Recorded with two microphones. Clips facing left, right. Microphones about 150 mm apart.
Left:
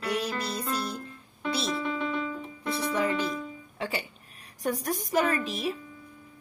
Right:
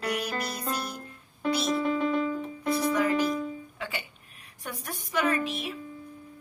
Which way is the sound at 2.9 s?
30° left (ahead or behind).